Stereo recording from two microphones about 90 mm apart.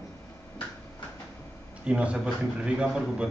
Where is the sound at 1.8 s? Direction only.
10° right (ahead or behind).